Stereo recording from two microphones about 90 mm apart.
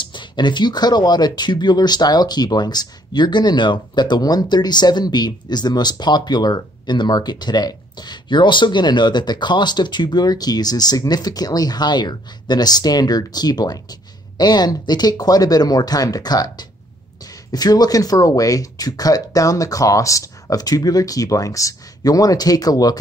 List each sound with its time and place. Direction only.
0.0 s speech: 60° left (ahead or behind); by 22.9 s 45° left (ahead or behind)